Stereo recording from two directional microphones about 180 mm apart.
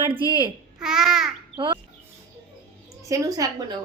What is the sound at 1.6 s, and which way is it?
Speech, 30° right (ahead or behind).